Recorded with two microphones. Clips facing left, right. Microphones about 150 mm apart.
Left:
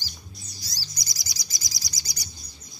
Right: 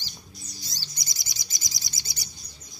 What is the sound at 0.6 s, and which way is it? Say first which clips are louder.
Chirp: left 1 dB; 25° right (ahead or behind).